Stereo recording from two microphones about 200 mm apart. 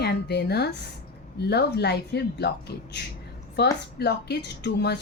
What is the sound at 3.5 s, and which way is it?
A woman's voice, 55° left (ahead or behind).